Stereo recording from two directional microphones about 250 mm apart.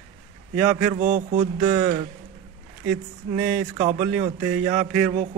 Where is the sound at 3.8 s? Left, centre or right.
Right.